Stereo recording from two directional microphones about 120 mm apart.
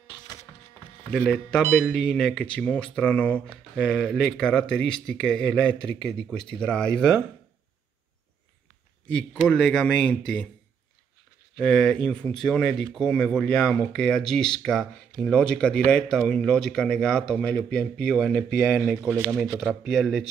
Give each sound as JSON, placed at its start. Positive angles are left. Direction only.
{"t": 1.1, "sound": "speech", "side_deg": 5}
{"t": 9.0, "sound": "speech", "side_deg": 10}
{"t": 11.5, "sound": "speech", "side_deg": 5}
{"t": 18.8, "sound": "speech", "side_deg": -15}
{"t": 19.2, "sound": "speech", "side_deg": 5}